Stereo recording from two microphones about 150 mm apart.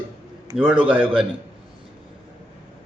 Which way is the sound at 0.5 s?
5° right (ahead or behind).